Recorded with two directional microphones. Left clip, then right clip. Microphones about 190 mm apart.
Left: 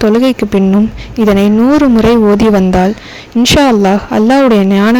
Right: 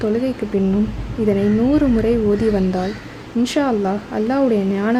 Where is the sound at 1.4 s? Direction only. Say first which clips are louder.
Left 7 dB; 45° left (ahead or behind).